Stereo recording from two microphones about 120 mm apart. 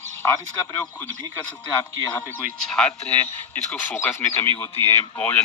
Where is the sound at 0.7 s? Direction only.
15° left (ahead or behind).